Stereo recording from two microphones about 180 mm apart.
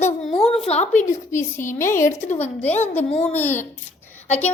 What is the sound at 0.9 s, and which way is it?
Speech, 15° left (ahead or behind).